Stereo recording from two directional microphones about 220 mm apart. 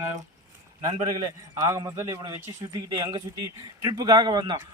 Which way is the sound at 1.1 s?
15° right (ahead or behind).